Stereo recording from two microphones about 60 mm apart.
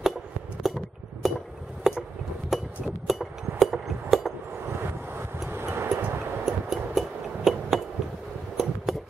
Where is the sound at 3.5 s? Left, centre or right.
Centre.